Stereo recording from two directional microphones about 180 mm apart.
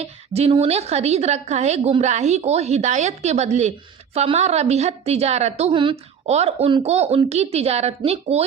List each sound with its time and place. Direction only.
0.0 s a woman's voice: 35° right (ahead or behind)